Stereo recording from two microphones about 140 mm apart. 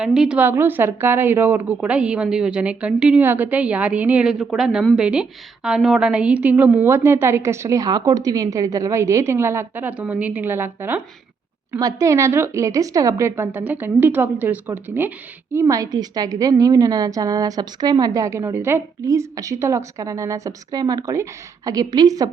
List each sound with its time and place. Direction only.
0.0 s a woman's voice: 5° right (ahead or behind)
11.7 s a woman's voice: 25° right (ahead or behind)